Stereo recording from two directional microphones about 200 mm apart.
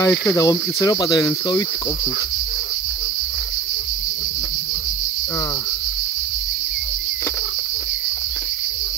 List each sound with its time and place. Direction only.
0.0 s cricket: 15° left (ahead or behind)